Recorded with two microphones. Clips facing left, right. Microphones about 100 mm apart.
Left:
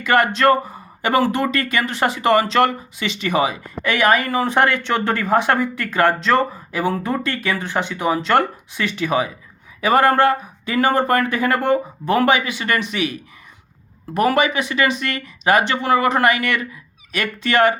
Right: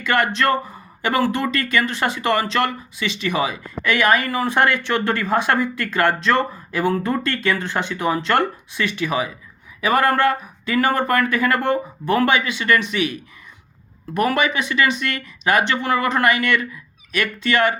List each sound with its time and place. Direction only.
0.3 s a sound: 20° left (ahead or behind)
1.1 s speech: 25° left (ahead or behind)
17.2 s speech: 35° left (ahead or behind)